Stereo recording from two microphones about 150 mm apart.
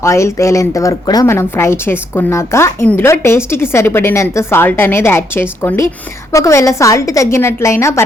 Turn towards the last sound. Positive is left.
turn(degrees=20)  # may be behind; listen again after turning